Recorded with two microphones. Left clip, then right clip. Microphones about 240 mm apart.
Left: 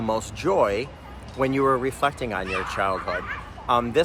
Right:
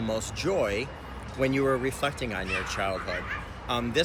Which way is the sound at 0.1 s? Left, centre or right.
Centre.